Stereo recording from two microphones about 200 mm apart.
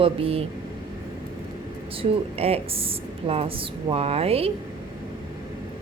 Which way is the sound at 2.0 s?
30° right (ahead or behind).